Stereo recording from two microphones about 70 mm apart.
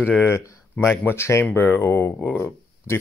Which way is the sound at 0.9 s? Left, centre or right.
Left.